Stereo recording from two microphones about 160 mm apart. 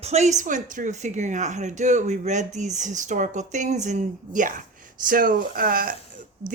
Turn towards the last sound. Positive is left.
turn(degrees=-65)  # may be behind; listen again after turning